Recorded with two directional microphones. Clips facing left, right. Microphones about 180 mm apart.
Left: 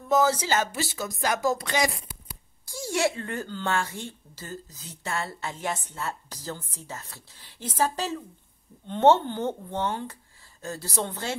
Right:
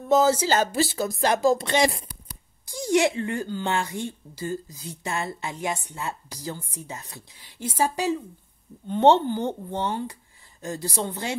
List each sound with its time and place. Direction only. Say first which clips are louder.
0.1 s a woman's voice: right 3 dB; 25° right (ahead or behind)